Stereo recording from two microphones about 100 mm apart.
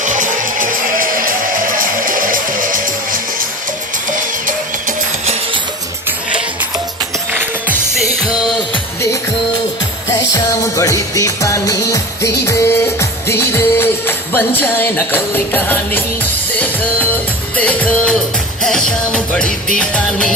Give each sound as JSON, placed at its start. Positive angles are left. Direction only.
{"t": 5.2, "sound": "music", "side_deg": -90}
{"t": 6.1, "sound": "music", "side_deg": -15}
{"t": 10.1, "sound": "music", "side_deg": 30}
{"t": 17.6, "sound": "music", "side_deg": 15}